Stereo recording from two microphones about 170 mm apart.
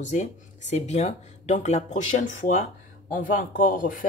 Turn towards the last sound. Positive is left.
turn(degrees=55)  # may be behind; listen again after turning